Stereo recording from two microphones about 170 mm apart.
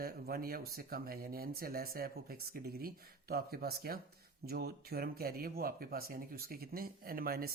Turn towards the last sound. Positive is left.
turn(degrees=-60)  # may be behind; listen again after turning